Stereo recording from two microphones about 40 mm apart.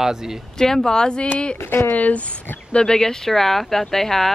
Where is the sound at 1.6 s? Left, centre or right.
Left.